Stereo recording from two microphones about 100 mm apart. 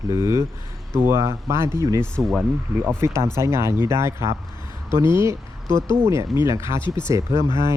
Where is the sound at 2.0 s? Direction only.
Centre (ahead or behind).